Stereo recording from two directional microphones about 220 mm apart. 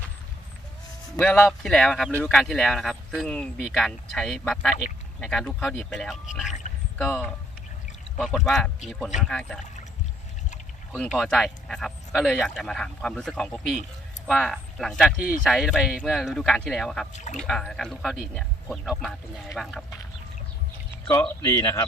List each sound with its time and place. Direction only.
1.2 s speech: 5° left (ahead or behind)
6.5 s rowboat: 35° left (ahead or behind)
8.2 s speech: centre (ahead or behind)
10.9 s speech: centre (ahead or behind)
21.1 s speech: 10° left (ahead or behind)